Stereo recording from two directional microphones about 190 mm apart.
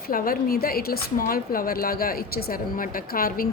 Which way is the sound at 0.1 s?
50° left (ahead or behind).